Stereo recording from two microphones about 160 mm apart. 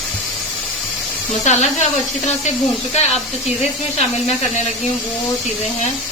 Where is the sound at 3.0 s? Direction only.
45° left (ahead or behind).